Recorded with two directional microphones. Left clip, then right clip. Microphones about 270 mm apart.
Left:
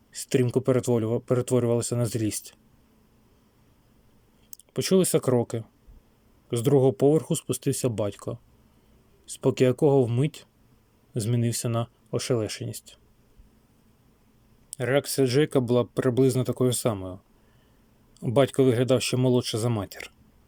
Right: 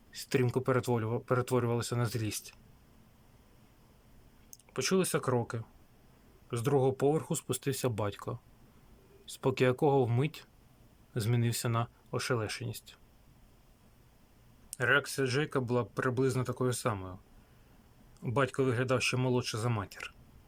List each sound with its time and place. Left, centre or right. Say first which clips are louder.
0.1 s speech: left 7 dB; centre
4.5 s speech: left 7 dB; centre
14.7 s speech: left 3 dB; centre
18.2 s speech: left 9 dB; centre